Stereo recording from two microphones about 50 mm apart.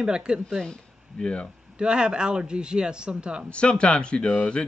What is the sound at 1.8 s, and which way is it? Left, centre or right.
Speech, centre.